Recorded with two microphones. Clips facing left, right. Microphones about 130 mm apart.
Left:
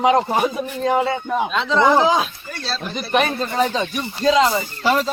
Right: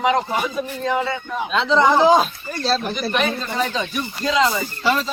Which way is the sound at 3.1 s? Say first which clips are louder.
Left 6 dB; 40° left (ahead or behind).